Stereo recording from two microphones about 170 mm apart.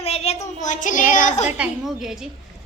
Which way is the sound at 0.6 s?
50° left (ahead or behind).